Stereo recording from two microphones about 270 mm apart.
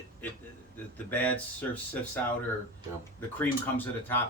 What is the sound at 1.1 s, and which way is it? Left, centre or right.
Speech, centre.